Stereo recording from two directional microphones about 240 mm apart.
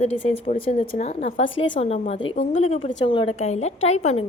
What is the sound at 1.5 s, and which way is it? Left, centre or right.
Speech, left.